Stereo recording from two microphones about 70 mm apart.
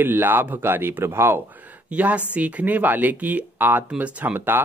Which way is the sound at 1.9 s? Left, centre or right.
Centre.